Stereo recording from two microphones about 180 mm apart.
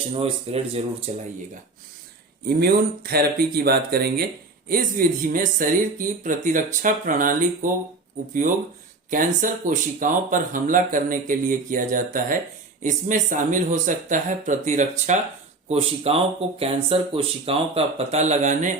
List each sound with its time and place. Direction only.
0.1 s speech: 35° right (ahead or behind)
2.4 s speech: 55° right (ahead or behind)